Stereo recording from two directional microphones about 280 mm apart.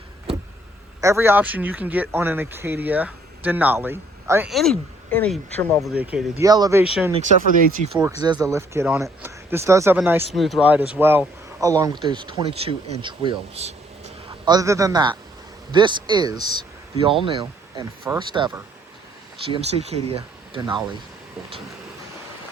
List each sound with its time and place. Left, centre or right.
1.0 s speech: centre
8.2 s a man's voice: centre